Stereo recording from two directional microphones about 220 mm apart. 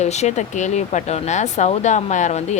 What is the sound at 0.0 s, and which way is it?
A woman's voice, 30° left (ahead or behind).